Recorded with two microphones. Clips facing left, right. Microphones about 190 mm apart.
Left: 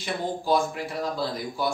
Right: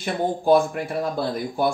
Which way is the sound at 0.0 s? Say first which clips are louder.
Right 6 dB; 55° right (ahead or behind).